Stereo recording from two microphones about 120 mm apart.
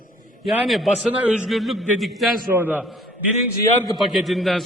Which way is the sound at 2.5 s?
15° right (ahead or behind).